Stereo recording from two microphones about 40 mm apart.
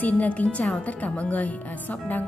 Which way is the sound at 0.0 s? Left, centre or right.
Left.